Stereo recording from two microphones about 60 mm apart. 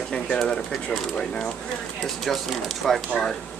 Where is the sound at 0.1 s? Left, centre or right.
Centre.